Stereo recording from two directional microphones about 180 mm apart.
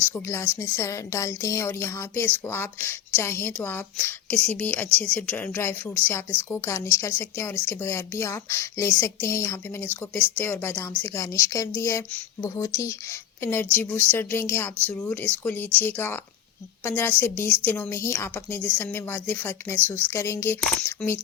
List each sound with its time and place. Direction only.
0.1 s a woman's voice: 15° left (ahead or behind)